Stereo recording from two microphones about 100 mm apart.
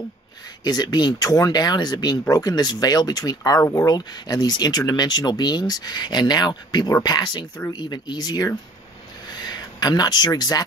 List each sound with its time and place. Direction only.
0.7 s speech: 45° left (ahead or behind)